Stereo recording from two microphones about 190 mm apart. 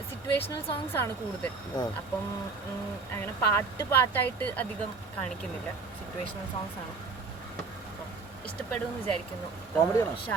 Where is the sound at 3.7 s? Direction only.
10° left (ahead or behind).